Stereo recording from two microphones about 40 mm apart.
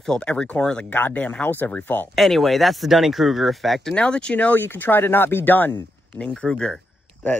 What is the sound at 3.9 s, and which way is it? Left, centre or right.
Speech, left.